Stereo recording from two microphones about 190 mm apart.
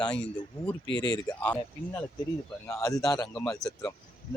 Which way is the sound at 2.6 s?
15° left (ahead or behind).